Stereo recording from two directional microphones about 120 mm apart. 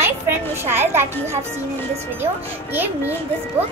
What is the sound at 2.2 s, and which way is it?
Speech, 15° right (ahead or behind).